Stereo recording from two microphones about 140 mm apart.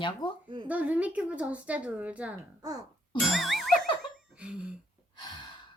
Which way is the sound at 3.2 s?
Centre (ahead or behind).